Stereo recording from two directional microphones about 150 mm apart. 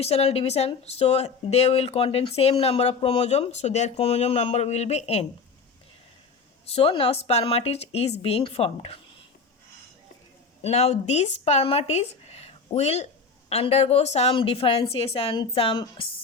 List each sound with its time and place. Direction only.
0.0 s speech: 40° left (ahead or behind)
6.7 s a woman's voice: 40° left (ahead or behind)
10.6 s a woman's voice: 45° left (ahead or behind)